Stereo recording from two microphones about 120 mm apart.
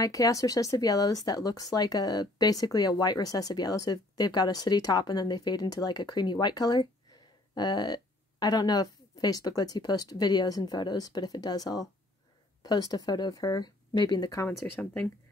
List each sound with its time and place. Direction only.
0.0 s speech: 30° left (ahead or behind)
14.4 s speech: 20° left (ahead or behind)